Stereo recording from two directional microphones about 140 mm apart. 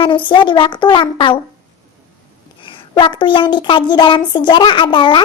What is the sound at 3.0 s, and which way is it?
Child singing, 35° left (ahead or behind).